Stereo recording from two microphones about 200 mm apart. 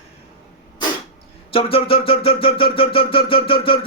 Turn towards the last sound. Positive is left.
turn(degrees=25)  # may be behind; listen again after turning